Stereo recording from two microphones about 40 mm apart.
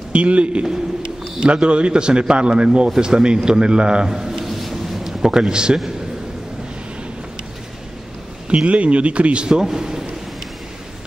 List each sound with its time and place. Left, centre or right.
0.1 s a man's voice: right
4.1 s a sound: centre
5.2 s a man's voice: centre
8.6 s speech: right
9.6 s a man's voice: centre